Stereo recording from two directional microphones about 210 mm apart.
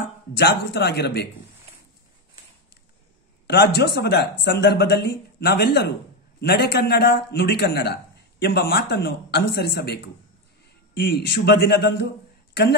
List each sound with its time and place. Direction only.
0.4 s a man's voice: 50° left (ahead or behind)
3.4 s a man's voice: 50° left (ahead or behind)